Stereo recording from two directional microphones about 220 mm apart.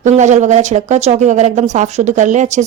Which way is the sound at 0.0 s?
35° right (ahead or behind).